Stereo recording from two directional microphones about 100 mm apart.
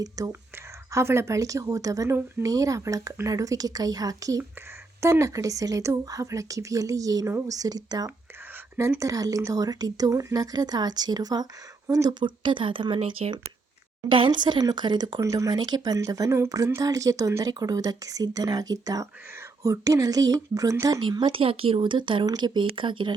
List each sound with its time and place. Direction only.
0.2 s a woman's voice: 35° right (ahead or behind)
8.7 s speech: 20° right (ahead or behind)
9.0 s a woman's voice: 35° right (ahead or behind)
12.2 s speech: 55° right (ahead or behind); by 13.3 s 70° right (ahead or behind)
14.1 s speech: 55° right (ahead or behind)
15.2 s a woman's voice: 30° right (ahead or behind)
21.0 s speech: 50° right (ahead or behind)